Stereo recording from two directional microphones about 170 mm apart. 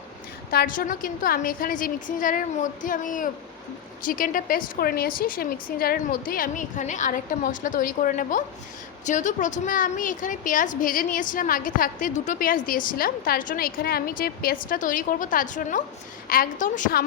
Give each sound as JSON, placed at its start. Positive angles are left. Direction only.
{"t": 0.5, "sound": "a woman's voice", "side_deg": 60}